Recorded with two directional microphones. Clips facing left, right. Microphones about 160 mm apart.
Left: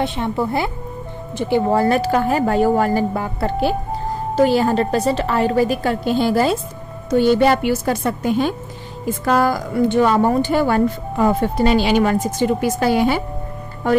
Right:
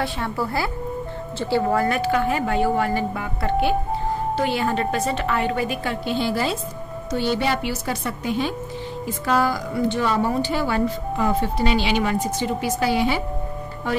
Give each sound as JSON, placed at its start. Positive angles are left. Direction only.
{"t": 0.0, "sound": "a woman's voice", "side_deg": 20}
{"t": 1.7, "sound": "a woman's voice", "side_deg": 30}